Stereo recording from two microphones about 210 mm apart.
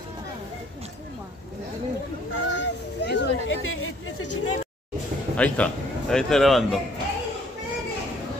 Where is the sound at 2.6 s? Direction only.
55° left (ahead or behind); by 4.3 s 70° left (ahead or behind).